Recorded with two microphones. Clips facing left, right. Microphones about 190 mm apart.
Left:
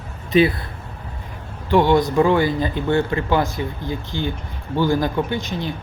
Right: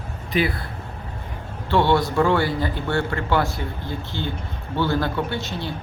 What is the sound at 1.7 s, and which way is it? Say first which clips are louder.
A man's voice: left 3 dB; 15° left (ahead or behind).